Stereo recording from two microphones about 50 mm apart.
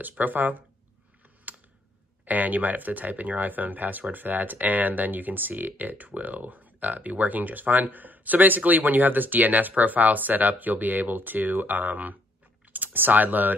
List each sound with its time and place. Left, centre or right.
0.1 s speech: right
2.2 s speech: right